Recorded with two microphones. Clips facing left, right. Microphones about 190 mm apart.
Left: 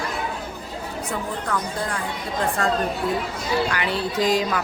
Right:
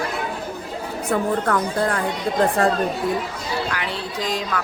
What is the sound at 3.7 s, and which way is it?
Speech, centre (ahead or behind).